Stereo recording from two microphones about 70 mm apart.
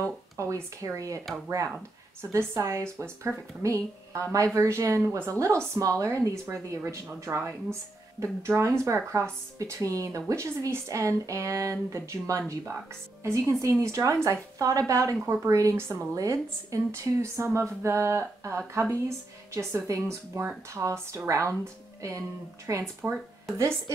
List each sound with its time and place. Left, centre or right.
0.4 s a woman's voice: right
2.3 s a woman's voice: right
7.2 s a woman's voice: right
22.7 s speech: right